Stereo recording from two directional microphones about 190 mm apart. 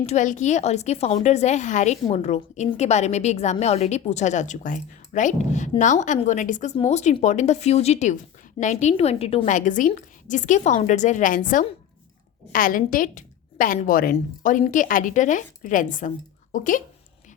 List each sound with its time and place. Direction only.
0.0 s a woman's voice: 40° left (ahead or behind)